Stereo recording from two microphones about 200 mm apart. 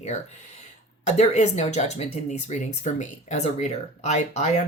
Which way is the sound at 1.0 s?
35° left (ahead or behind).